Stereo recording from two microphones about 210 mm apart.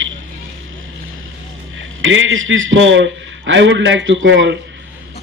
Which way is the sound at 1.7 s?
65° right (ahead or behind).